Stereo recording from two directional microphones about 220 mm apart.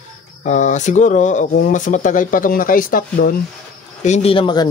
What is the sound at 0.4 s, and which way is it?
Speech, 35° left (ahead or behind).